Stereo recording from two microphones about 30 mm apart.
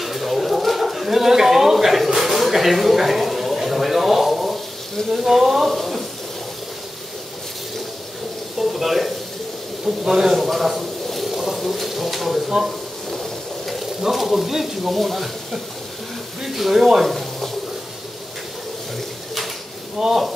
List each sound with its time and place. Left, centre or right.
0.0 s pigeon: centre
2.1 s a sound: centre
5.1 s speech: centre
8.5 s a sound: centre
9.8 s speech: centre
11.2 s a sound: centre
13.7 s speech: centre
16.4 s speech: centre
20.0 s speech: centre